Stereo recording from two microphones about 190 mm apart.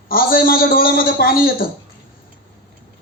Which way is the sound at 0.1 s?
50° left (ahead or behind).